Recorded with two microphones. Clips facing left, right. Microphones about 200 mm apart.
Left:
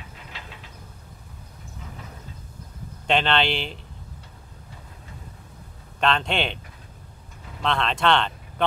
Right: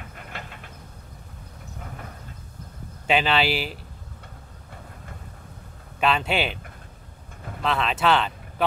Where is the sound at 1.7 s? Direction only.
55° right (ahead or behind).